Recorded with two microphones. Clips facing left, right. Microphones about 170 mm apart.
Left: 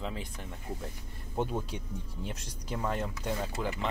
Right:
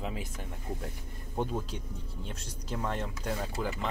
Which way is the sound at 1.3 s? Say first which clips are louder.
Even; 5° left (ahead or behind).